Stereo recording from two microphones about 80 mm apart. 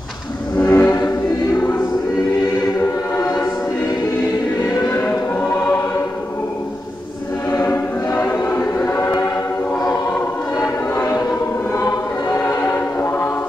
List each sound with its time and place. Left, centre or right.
0.6 s music: left
3.2 s music: left
4.6 s music: left
5.4 s choir: left
7.5 s choir: left
11.0 s music: left
11.7 s choir: left